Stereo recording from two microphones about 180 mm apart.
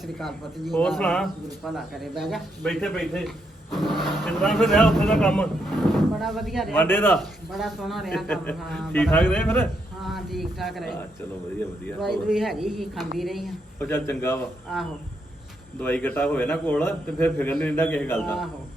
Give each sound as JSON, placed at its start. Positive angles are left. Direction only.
{"t": 0.0, "sound": "speech", "side_deg": 0}
{"t": 6.8, "sound": "a man's voice", "side_deg": 10}
{"t": 7.2, "sound": "speech", "side_deg": 0}
{"t": 13.7, "sound": "a man's voice", "side_deg": 10}
{"t": 14.7, "sound": "speech", "side_deg": 0}
{"t": 15.8, "sound": "a man's voice", "side_deg": 10}